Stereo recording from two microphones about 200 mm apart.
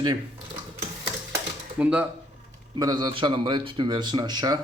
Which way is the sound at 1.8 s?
5° right (ahead or behind).